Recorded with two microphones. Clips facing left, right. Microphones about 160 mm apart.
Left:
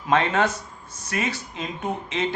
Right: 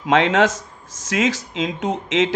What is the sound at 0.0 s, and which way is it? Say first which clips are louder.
Speech: right 5 dB; 90° right.